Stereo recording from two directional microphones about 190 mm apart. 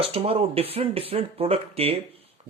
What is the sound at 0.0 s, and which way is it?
Speech, 30° right (ahead or behind).